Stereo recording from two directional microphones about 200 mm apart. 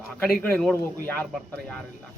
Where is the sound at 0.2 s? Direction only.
5° left (ahead or behind).